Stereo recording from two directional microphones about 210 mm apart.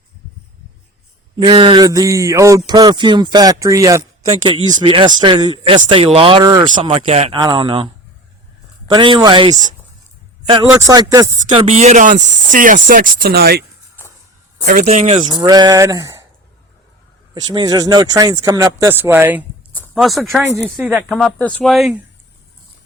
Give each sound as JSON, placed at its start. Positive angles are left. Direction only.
{"t": 1.4, "sound": "speech", "side_deg": -20}
{"t": 8.9, "sound": "speech", "side_deg": -20}
{"t": 11.7, "sound": "speech", "side_deg": -35}
{"t": 14.7, "sound": "speech", "side_deg": -35}
{"t": 17.3, "sound": "speech", "side_deg": -20}
{"t": 19.7, "sound": "speech", "side_deg": 5}